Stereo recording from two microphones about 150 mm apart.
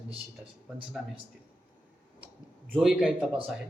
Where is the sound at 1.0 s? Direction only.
Centre (ahead or behind).